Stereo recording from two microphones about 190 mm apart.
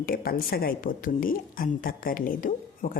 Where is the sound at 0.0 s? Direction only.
50° left (ahead or behind).